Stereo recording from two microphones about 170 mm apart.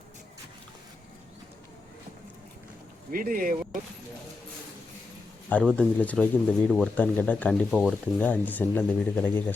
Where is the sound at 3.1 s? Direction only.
55° right (ahead or behind).